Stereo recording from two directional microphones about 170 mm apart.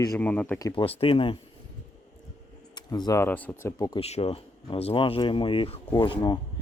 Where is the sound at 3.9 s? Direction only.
35° left (ahead or behind).